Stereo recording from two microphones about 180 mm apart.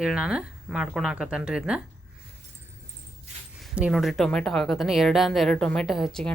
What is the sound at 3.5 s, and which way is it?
A woman's voice, 5° right (ahead or behind).